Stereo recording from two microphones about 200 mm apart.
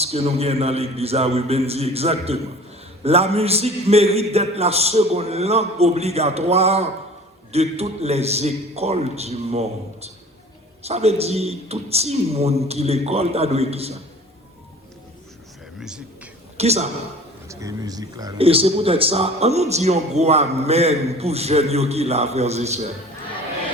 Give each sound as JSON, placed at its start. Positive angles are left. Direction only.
{"t": 0.0, "sound": "a man's voice", "side_deg": -30}
{"t": 15.8, "sound": "a sound", "side_deg": -5}
{"t": 16.6, "sound": "a man's voice", "side_deg": -30}
{"t": 17.5, "sound": "speech", "side_deg": -15}
{"t": 18.3, "sound": "a man's voice", "side_deg": -30}